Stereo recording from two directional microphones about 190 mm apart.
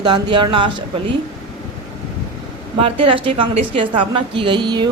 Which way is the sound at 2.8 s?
30° right (ahead or behind).